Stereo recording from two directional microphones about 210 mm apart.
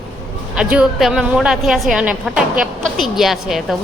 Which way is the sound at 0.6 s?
5° right (ahead or behind).